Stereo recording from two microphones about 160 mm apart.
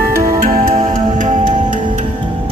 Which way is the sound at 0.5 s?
55° right (ahead or behind).